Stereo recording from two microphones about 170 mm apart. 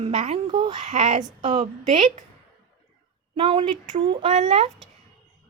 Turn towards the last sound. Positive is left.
turn(degrees=-40)  # may be behind; listen again after turning